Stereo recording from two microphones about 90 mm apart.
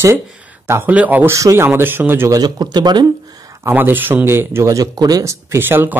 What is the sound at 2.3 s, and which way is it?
Speech, 50° right (ahead or behind).